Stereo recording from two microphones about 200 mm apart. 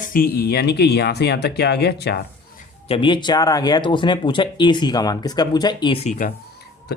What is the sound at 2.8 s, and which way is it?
Speech, 25° left (ahead or behind).